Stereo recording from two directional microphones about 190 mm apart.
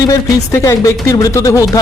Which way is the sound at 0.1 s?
20° left (ahead or behind).